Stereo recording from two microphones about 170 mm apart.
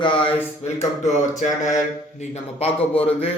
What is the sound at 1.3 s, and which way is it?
A man's voice, 45° left (ahead or behind).